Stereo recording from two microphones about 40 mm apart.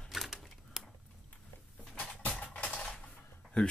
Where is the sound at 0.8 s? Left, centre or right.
Centre.